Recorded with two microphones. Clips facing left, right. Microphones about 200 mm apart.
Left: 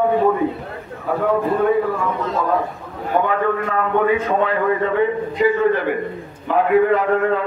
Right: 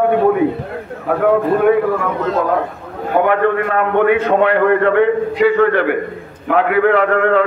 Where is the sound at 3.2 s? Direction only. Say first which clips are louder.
Right 5 dB; 75° right (ahead or behind).